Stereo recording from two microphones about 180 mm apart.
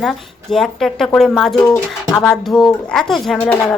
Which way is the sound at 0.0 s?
Centre (ahead or behind).